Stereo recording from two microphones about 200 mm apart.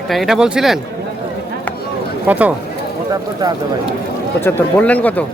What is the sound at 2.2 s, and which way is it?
Speech, 5° right (ahead or behind).